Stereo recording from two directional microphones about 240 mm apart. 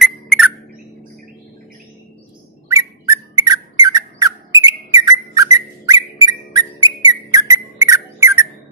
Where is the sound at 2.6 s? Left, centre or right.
Centre.